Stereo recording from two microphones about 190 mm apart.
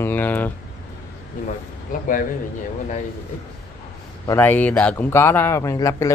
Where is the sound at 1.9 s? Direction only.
45° left (ahead or behind).